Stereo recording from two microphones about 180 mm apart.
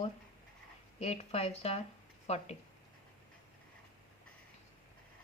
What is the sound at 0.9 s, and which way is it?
A woman's voice, 35° left (ahead or behind).